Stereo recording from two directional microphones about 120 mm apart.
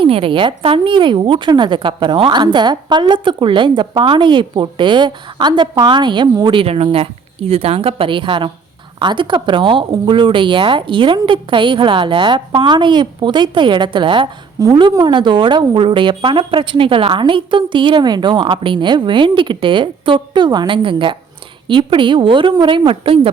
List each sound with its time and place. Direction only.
0.0 s a woman's voice: 45° right (ahead or behind)